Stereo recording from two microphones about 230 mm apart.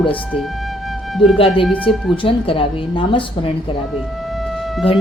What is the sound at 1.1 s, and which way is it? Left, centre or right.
Speech, centre.